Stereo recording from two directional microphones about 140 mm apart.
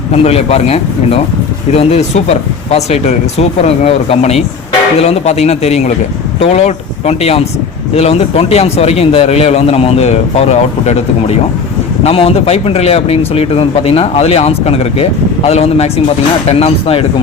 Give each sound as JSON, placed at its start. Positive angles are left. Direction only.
{"t": 0.1, "sound": "speech", "side_deg": 45}